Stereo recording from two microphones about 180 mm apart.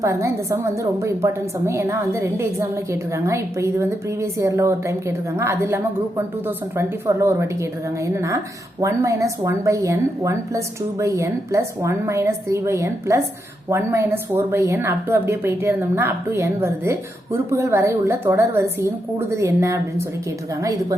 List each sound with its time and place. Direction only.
0.0 s a woman's voice: 15° right (ahead or behind)